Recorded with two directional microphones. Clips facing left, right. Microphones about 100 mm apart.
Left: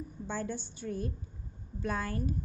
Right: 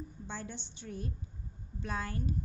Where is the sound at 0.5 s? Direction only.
25° right (ahead or behind).